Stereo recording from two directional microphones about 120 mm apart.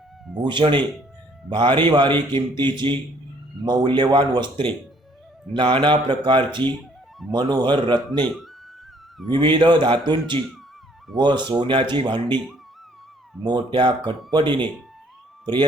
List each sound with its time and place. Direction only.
0.4 s a man's voice: 40° right (ahead or behind)
9.3 s a man's voice: 40° right (ahead or behind)
13.4 s a man's voice: 40° right (ahead or behind)